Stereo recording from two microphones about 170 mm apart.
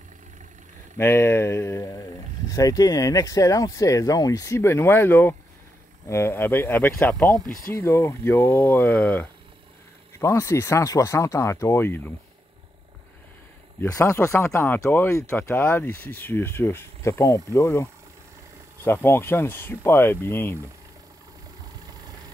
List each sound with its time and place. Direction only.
0.9 s speech: 15° left (ahead or behind)
13.7 s speech: 15° left (ahead or behind)
18.9 s speech: 15° left (ahead or behind)